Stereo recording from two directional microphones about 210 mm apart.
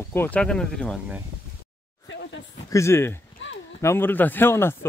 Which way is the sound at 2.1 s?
60° left (ahead or behind).